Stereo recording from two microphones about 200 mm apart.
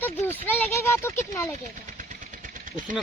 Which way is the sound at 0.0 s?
10° left (ahead or behind).